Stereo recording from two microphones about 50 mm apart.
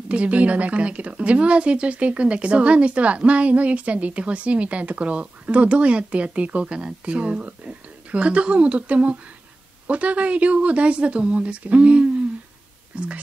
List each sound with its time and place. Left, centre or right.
0.1 s a woman's voice: right